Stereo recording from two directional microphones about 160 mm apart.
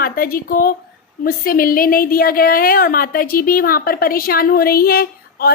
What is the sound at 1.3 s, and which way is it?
A woman's voice, 65° left (ahead or behind).